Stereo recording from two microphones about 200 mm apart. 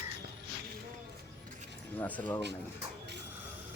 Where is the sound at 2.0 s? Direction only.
10° left (ahead or behind).